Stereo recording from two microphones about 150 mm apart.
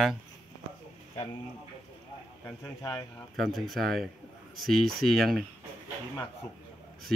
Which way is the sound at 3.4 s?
Centre (ahead or behind).